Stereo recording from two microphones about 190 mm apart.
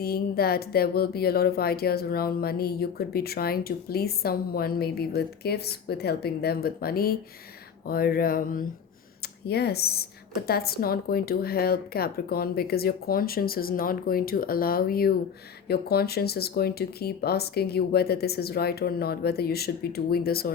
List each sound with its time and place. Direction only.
0.0 s a woman's voice: 55° left (ahead or behind)
9.5 s a woman's voice: 60° left (ahead or behind)